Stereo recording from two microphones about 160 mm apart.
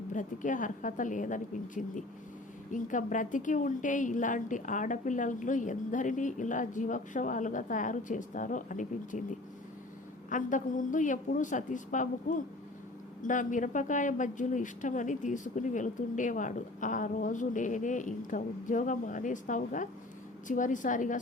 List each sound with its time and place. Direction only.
0.1 s speech: 55° left (ahead or behind)
10.2 s speech: 55° left (ahead or behind)